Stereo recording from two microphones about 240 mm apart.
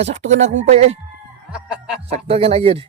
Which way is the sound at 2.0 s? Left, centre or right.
Right.